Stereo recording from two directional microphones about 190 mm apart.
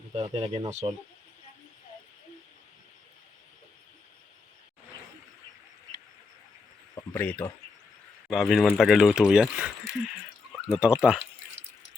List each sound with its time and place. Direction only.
0.2 s speech: 30° right (ahead or behind)
7.1 s speech: 10° left (ahead or behind)
8.3 s speech: centre (ahead or behind)
10.8 s speech: 5° right (ahead or behind)